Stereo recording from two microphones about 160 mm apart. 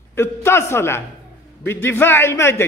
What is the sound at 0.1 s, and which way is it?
A man's voice, 15° left (ahead or behind).